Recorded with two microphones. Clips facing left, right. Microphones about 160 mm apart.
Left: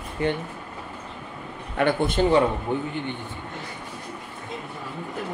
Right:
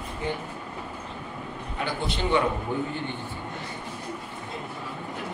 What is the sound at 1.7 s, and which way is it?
Speech, 60° left (ahead or behind).